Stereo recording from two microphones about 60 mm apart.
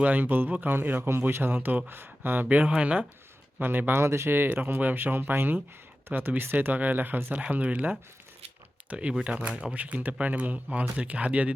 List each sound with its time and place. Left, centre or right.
0.0 s speech: right
2.6 s speech: centre
3.6 s speech: right
4.0 s speech: right
9.5 s speech: centre
9.7 s speech: right